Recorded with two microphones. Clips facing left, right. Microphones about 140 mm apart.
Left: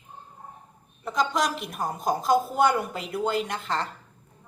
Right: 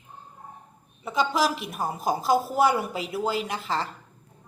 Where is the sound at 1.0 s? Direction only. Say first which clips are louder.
Right 1 dB; 5° right (ahead or behind).